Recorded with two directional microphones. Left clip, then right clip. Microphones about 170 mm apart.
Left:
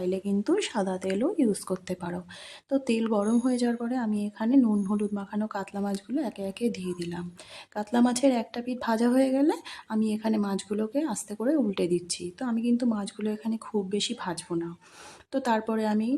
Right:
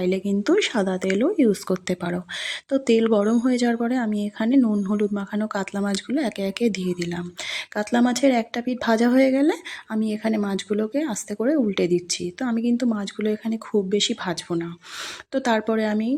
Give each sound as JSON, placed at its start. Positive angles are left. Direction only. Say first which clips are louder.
{"t": 0.0, "sound": "speech", "louder": "right 6 dB", "side_deg": -15}